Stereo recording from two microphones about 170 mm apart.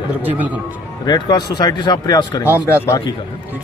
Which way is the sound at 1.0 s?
25° left (ahead or behind).